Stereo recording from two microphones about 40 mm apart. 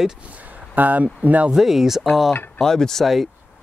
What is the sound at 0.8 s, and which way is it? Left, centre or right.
Speech, right.